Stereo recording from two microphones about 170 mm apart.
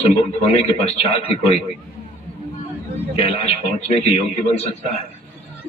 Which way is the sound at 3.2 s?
35° left (ahead or behind).